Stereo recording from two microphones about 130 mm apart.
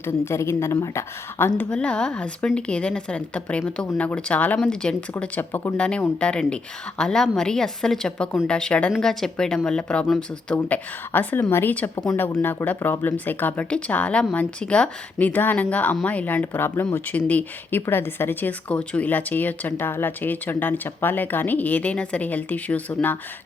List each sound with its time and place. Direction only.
0.0 s a woman's voice: 20° left (ahead or behind)
1.7 s speech: 10° left (ahead or behind)